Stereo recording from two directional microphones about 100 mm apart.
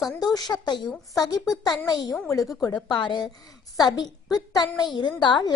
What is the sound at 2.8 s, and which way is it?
A woman's voice, 50° left (ahead or behind).